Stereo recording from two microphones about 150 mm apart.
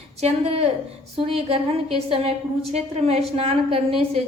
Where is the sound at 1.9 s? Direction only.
40° right (ahead or behind).